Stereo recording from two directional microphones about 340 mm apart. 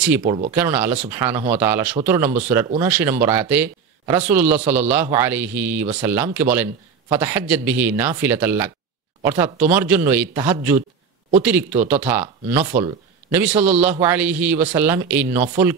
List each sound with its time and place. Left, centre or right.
0.2 s speech: right
0.6 s speech: centre
11.9 s speech: centre